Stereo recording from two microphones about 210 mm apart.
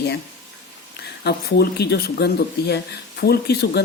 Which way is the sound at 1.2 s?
50° left (ahead or behind).